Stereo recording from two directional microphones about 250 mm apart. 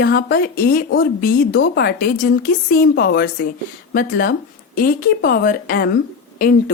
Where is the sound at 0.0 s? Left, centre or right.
Left.